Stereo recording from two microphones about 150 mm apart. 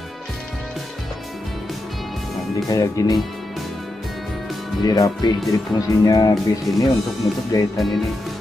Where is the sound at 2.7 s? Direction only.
25° left (ahead or behind).